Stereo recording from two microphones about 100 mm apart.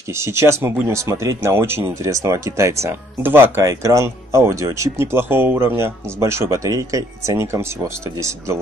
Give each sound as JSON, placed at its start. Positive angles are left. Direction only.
{"t": 0.1, "sound": "speech", "side_deg": -25}